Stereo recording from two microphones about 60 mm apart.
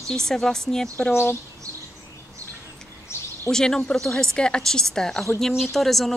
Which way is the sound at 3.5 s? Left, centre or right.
Centre.